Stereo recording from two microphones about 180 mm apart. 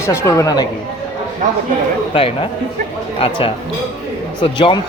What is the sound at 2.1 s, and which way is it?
A man's voice, 30° left (ahead or behind).